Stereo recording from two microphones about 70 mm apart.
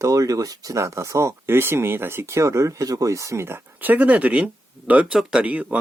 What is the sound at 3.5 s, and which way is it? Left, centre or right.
Speech, right.